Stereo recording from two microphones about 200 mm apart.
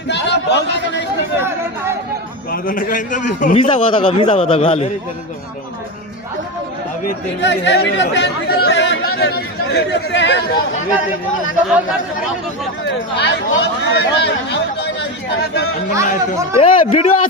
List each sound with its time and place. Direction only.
0.1 s a man's voice: 60° left (ahead or behind)
1.4 s chatter: 10° right (ahead or behind)
2.5 s a man's voice: 45° left (ahead or behind)
3.6 s a man's voice: 25° left (ahead or behind)
7.4 s speech: 60° left (ahead or behind)
12.8 s speech: 60° left (ahead or behind)
16.6 s a man's voice: 30° left (ahead or behind)